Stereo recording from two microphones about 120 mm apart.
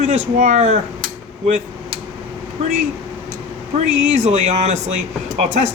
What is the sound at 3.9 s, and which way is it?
Speech, 70° right (ahead or behind).